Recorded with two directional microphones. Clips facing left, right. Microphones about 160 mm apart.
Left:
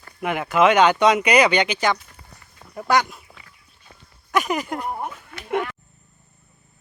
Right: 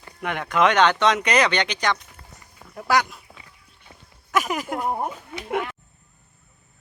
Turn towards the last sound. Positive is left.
turn(degrees=0)  # may be behind; listen again after turning